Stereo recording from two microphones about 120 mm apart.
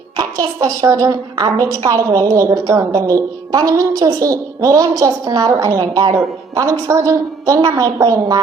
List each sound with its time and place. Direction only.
0.2 s a woman's voice: 30° right (ahead or behind)